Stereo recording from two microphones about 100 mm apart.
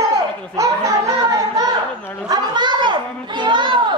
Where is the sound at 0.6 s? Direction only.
35° right (ahead or behind).